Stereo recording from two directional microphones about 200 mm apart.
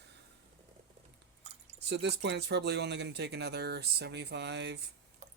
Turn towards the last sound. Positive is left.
turn(degrees=-55)  # may be behind; listen again after turning